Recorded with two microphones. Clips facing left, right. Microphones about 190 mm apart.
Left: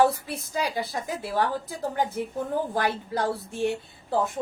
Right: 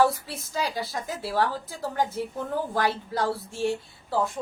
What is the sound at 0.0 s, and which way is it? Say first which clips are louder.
A woman's voice: left 1 dB; 15° left (ahead or behind).